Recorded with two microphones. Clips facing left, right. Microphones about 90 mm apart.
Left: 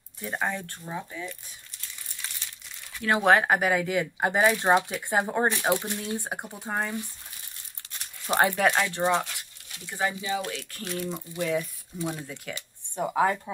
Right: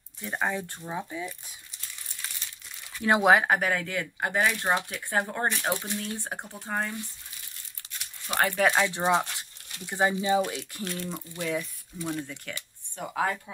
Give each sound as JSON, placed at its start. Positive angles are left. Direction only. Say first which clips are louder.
{"t": 0.2, "sound": "speech", "louder": "even", "side_deg": 0}
{"t": 3.0, "sound": "speech", "louder": "right 2 dB", "side_deg": -20}
{"t": 3.3, "sound": "speech", "louder": "left 1 dB", "side_deg": -5}
{"t": 3.5, "sound": "speech", "louder": "left 3 dB", "side_deg": 5}
{"t": 8.5, "sound": "speech", "louder": "even", "side_deg": 5}
{"t": 8.8, "sound": "speech", "louder": "even", "side_deg": -15}
{"t": 10.8, "sound": "speech", "louder": "left 4 dB", "side_deg": 0}
{"t": 12.9, "sound": "speech", "louder": "left 5 dB", "side_deg": 20}